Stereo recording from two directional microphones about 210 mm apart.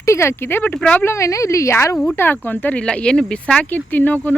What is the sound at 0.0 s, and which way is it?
Speech, 15° left (ahead or behind).